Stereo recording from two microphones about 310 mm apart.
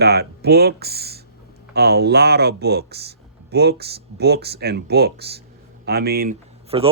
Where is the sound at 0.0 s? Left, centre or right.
Right.